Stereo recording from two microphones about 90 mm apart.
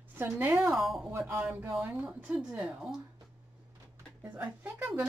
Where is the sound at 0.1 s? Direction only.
20° right (ahead or behind).